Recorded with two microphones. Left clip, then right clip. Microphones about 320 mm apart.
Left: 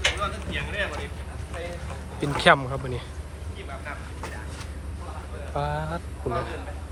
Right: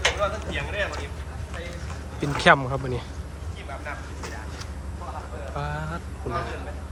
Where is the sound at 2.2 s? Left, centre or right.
Centre.